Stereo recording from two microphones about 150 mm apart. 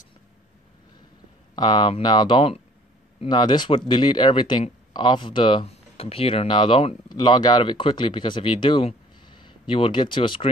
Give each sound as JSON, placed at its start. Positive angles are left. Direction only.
{"t": 1.5, "sound": "speech", "side_deg": 30}